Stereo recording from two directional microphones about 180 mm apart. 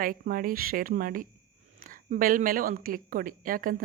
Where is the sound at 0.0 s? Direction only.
50° right (ahead or behind).